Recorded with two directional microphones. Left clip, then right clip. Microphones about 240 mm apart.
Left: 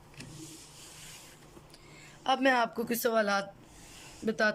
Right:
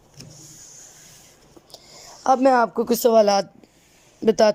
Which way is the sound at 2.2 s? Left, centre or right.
Right.